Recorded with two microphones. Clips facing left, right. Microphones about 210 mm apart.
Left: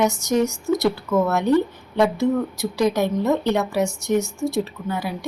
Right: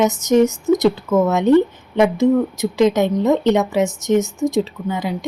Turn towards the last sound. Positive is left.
turn(degrees=-20)  # may be behind; listen again after turning